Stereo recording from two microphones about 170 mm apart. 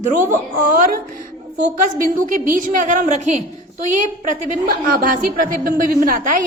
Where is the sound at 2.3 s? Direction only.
55° right (ahead or behind).